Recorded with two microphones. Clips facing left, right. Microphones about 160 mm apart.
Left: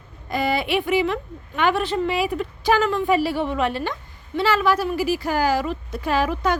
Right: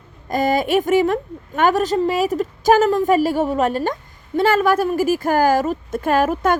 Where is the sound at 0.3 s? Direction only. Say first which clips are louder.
Right 4 dB; 45° right (ahead or behind).